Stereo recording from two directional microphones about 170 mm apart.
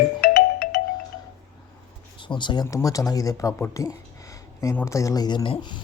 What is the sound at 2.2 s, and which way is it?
Speech, 30° left (ahead or behind).